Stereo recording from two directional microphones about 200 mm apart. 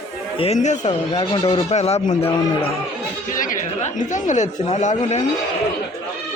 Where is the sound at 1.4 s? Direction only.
30° left (ahead or behind).